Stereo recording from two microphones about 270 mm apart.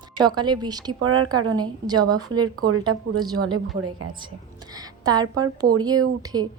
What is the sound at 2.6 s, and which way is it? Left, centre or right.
Speech, right.